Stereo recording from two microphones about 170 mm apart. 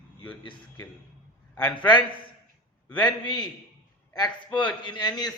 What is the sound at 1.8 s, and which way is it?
A man's voice, 25° left (ahead or behind).